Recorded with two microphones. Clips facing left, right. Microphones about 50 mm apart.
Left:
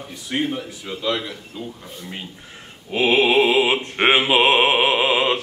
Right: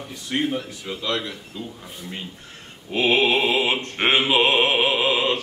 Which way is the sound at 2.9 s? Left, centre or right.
Centre.